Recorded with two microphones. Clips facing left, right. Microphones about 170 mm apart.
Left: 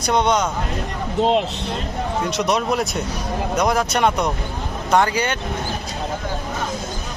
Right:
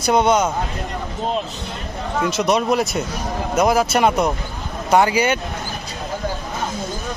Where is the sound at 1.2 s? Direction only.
75° left (ahead or behind).